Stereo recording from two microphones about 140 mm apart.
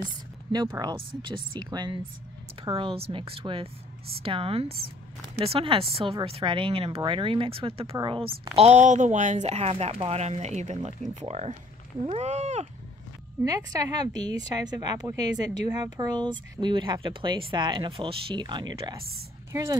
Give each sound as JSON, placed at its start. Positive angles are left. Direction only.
{"t": 0.5, "sound": "speech", "side_deg": -30}
{"t": 2.7, "sound": "a woman's voice", "side_deg": -40}
{"t": 13.4, "sound": "a woman's voice", "side_deg": -25}